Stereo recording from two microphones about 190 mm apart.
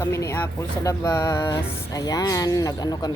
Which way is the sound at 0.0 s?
15° left (ahead or behind).